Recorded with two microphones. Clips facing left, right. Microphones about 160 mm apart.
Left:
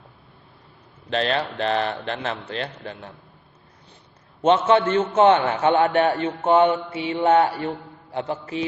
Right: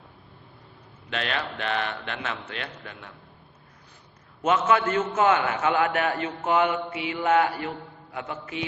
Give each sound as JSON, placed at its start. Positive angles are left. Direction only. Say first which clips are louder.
{"t": 1.1, "sound": "a man's voice", "louder": "left 7 dB", "side_deg": 35}
{"t": 4.4, "sound": "a man's voice", "louder": "left 5 dB", "side_deg": 30}